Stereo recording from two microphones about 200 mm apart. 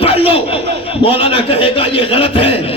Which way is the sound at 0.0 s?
30° left (ahead or behind).